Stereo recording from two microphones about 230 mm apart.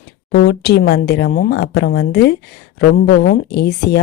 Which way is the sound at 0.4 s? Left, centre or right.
Left.